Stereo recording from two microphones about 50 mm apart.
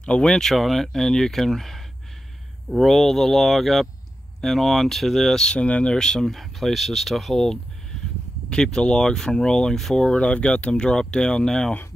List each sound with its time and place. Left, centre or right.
0.0 s speech: centre
2.8 s speech: centre; by 5.9 s left
5.9 s speech: centre
10.1 s speech: left